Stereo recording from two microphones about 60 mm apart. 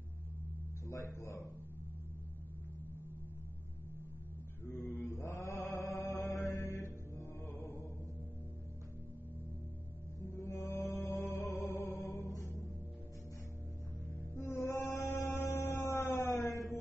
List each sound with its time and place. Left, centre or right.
0.8 s speech: left
4.6 s mantra: left
7.4 s music: left
10.2 s mantra: left
14.1 s music: left
16.3 s mantra: left